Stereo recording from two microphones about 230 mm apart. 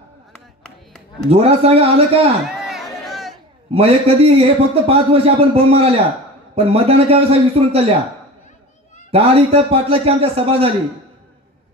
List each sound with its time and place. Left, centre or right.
1.3 s speech: right
2.4 s a sound: centre
3.7 s speech: right
9.1 s speech: right